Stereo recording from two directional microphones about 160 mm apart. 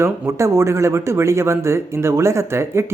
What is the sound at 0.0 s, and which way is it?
Speech, 15° right (ahead or behind).